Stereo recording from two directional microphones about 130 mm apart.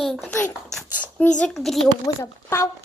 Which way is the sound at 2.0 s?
25° left (ahead or behind).